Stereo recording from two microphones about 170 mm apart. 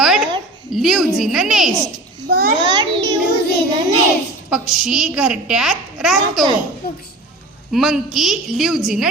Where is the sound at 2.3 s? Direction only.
60° right (ahead or behind).